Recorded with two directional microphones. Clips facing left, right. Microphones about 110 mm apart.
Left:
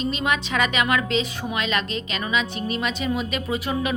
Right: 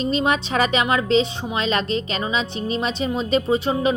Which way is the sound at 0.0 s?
35° right (ahead or behind).